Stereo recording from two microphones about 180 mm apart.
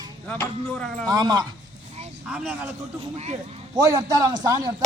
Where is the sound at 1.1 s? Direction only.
20° right (ahead or behind).